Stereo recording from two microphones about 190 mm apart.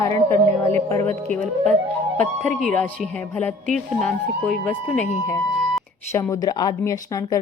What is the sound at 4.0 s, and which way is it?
Speech, 5° left (ahead or behind).